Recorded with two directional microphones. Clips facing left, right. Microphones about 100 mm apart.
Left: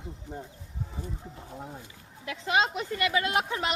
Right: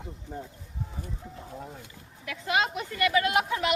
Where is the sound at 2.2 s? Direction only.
25° left (ahead or behind).